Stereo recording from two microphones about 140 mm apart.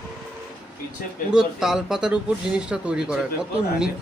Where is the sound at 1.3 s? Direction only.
5° right (ahead or behind).